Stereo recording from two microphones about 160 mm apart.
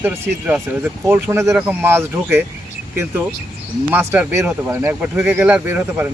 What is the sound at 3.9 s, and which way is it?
Speech, 10° right (ahead or behind).